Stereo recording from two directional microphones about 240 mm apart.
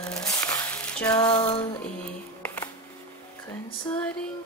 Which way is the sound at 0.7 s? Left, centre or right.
Centre.